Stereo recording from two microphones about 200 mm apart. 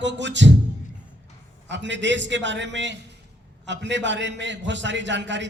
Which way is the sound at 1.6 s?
65° right (ahead or behind).